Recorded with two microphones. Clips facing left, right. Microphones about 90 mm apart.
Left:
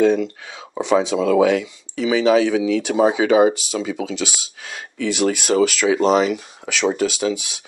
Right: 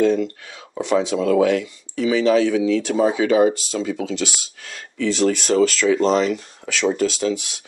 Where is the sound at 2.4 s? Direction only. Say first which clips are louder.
Even; 90° left.